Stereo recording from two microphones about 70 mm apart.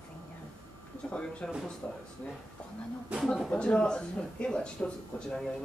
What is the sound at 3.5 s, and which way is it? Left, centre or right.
Speech, centre.